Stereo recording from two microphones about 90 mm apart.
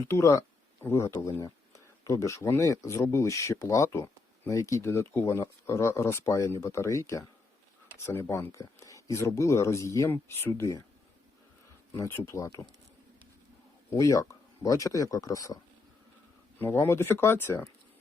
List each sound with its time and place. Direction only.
0.0 s speech: 35° left (ahead or behind)
10.1 s speech: 25° left (ahead or behind)
11.9 s speech: 35° left (ahead or behind)
13.9 s speech: 35° left (ahead or behind)
16.6 s speech: 25° left (ahead or behind)